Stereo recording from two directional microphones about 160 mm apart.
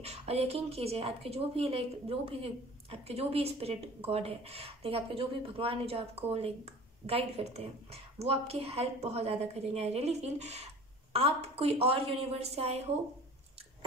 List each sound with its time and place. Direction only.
0.0 s a woman's voice: 40° right (ahead or behind)